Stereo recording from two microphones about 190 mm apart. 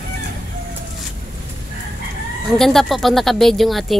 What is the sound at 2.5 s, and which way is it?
Speech, centre (ahead or behind).